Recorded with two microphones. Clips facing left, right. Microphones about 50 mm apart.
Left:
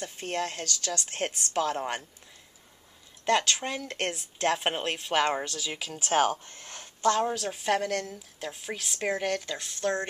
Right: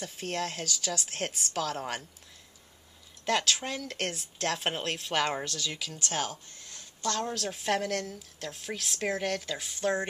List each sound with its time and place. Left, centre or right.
0.0 s a woman's voice: centre
1.5 s speech: centre
3.3 s speech: centre
6.1 s speech: left
7.0 s a woman's voice: centre
7.3 s a woman's voice: centre